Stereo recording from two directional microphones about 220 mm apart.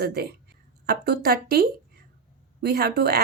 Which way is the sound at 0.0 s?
45° right (ahead or behind).